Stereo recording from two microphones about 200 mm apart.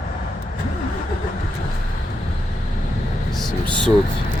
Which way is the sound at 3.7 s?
5° left (ahead or behind).